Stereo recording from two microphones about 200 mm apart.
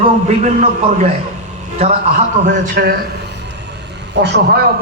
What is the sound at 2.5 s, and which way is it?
Speech, 50° right (ahead or behind).